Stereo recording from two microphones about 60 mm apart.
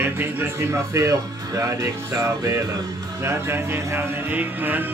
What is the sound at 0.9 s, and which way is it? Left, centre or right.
Speech, right.